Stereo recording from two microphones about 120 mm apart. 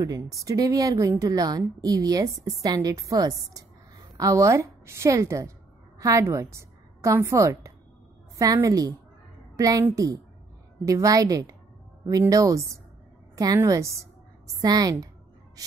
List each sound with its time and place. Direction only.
0.0 s a woman's voice: 30° right (ahead or behind)
13.7 s a woman's voice: 25° right (ahead or behind)